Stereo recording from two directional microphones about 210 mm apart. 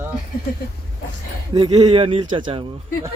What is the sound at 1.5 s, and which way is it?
Speech, 20° right (ahead or behind).